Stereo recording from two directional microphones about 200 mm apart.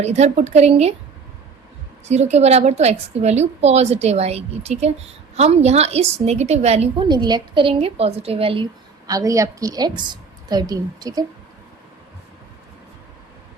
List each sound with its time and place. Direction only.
0.0 s a woman's voice: 35° right (ahead or behind)
2.0 s a woman's voice: 35° right (ahead or behind)
7.2 s a woman's voice: 20° right (ahead or behind)
9.0 s a woman's voice: 15° right (ahead or behind)